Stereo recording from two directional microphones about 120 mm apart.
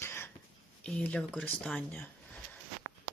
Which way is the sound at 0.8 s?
10° left (ahead or behind).